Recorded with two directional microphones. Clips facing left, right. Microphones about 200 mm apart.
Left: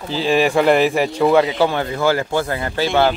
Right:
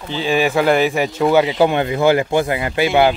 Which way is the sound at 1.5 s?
15° right (ahead or behind).